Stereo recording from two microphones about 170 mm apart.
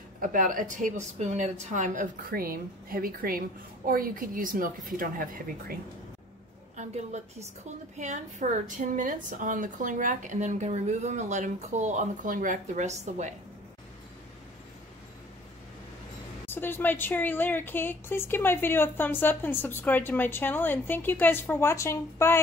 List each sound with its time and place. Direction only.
0.2 s a woman's voice: 50° right (ahead or behind)
6.8 s a woman's voice: 40° right (ahead or behind)
16.4 s a woman's voice: 10° left (ahead or behind)